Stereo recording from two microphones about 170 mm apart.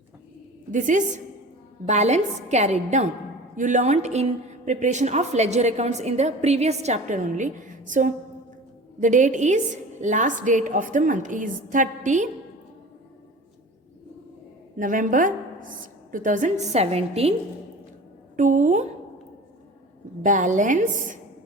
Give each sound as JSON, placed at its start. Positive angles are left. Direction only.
{"t": 0.7, "sound": "a woman's voice", "side_deg": -50}
{"t": 14.8, "sound": "a woman's voice", "side_deg": -50}
{"t": 18.3, "sound": "a woman's voice", "side_deg": -45}
{"t": 20.2, "sound": "a woman's voice", "side_deg": -50}